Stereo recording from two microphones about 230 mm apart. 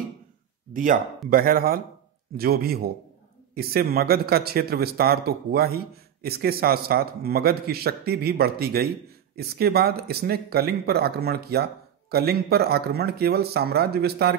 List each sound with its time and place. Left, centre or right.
0.7 s a man's voice: right